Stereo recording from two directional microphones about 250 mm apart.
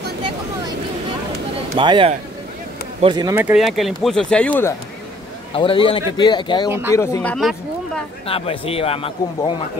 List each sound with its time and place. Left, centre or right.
1.8 s speech: centre
5.5 s speech: left; by 8.0 s centre
8.3 s speech: left